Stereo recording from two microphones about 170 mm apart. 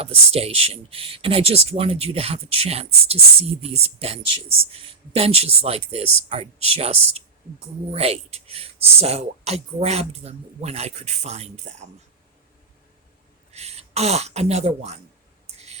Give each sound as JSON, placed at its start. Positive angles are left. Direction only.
{"t": 0.0, "sound": "speech", "side_deg": -35}
{"t": 13.5, "sound": "speech", "side_deg": -40}
{"t": 15.4, "sound": "a sound", "side_deg": -40}